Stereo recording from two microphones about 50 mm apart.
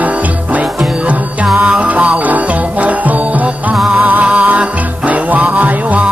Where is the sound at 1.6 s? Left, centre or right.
Right.